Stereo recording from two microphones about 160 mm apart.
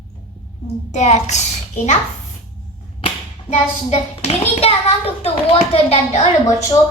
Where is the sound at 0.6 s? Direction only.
45° left (ahead or behind).